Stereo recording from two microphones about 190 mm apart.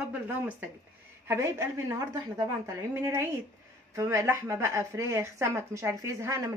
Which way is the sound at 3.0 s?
15° right (ahead or behind).